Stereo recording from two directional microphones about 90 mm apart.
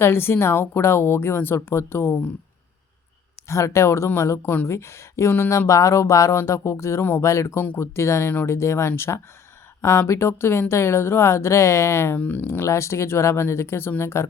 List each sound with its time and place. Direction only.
0.0 s speech: 25° left (ahead or behind)
3.5 s speech: 30° left (ahead or behind)